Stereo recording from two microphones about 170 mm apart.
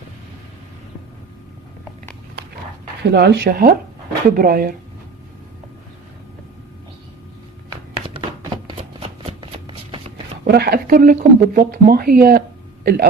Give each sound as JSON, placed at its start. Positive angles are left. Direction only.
{"t": 3.1, "sound": "speech", "side_deg": -80}
{"t": 9.2, "sound": "shuffling cards", "side_deg": -30}
{"t": 10.4, "sound": "speech", "side_deg": -70}